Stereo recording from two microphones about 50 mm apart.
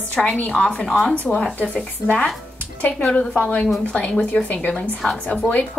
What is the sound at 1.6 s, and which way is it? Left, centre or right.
A woman's voice, left.